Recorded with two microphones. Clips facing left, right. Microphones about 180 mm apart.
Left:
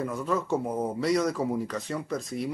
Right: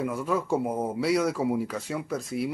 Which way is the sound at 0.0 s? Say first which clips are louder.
Right 1 dB; 10° right (ahead or behind).